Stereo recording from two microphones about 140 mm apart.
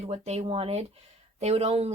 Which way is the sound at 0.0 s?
45° right (ahead or behind).